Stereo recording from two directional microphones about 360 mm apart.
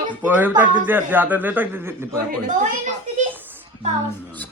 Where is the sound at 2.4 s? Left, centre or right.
Right.